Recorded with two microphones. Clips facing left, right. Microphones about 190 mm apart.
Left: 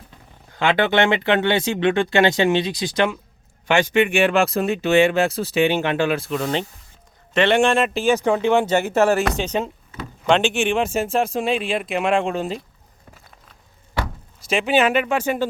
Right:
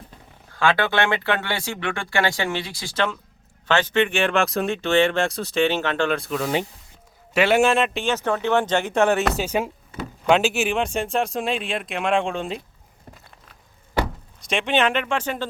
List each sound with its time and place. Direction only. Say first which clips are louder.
0.5 s speech: left 3 dB; 20° left (ahead or behind); by 8.1 s centre (ahead or behind)
8.1 s speech: left 4 dB; 15° left (ahead or behind)
14.4 s speech: left 3 dB; 5° left (ahead or behind)